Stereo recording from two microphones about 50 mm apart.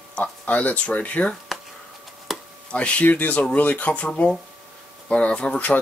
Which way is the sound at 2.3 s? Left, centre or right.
Centre.